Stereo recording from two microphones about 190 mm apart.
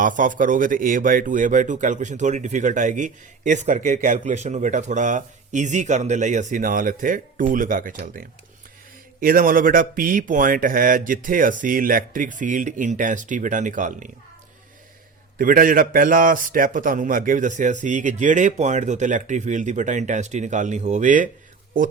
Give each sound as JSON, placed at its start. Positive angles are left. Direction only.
{"t": 0.0, "sound": "speech", "side_deg": -45}
{"t": 15.4, "sound": "speech", "side_deg": -45}